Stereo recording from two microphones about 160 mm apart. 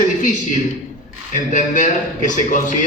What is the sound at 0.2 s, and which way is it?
A man's voice, 50° left (ahead or behind).